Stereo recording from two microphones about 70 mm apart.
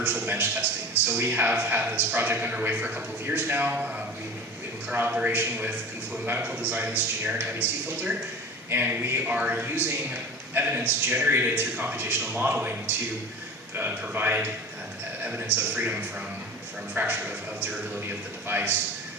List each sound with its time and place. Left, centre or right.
0.0 s a man's voice: right
13.7 s a man's voice: right
15.2 s music: right
15.7 s a man's voice: right